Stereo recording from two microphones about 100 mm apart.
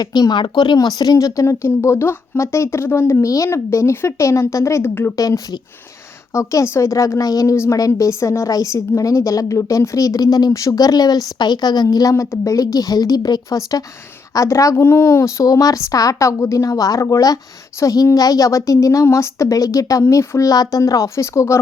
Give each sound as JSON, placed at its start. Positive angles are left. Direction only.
{"t": 0.0, "sound": "speech", "side_deg": 45}
{"t": 5.1, "sound": "a woman's voice", "side_deg": 35}